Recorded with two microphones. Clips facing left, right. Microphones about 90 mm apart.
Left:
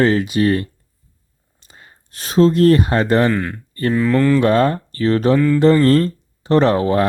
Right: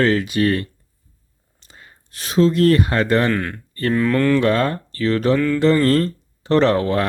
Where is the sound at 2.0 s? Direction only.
35° left (ahead or behind).